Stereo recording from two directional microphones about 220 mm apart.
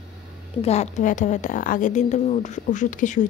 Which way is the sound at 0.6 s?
30° left (ahead or behind).